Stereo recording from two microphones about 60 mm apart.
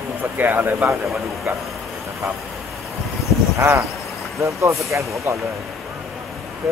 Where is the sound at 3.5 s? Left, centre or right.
Right.